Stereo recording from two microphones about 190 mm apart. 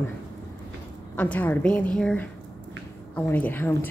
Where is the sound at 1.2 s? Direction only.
10° left (ahead or behind).